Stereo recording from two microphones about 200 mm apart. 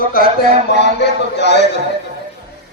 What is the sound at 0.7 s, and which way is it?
Speech, 60° left (ahead or behind).